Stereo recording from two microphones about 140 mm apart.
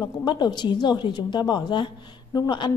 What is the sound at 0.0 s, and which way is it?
A woman's voice, 30° left (ahead or behind).